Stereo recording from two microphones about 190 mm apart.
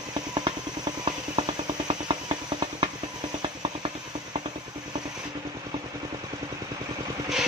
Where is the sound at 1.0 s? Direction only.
25° right (ahead or behind).